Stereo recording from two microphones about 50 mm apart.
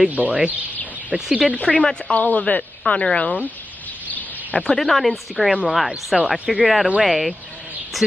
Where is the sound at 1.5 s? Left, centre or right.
Left.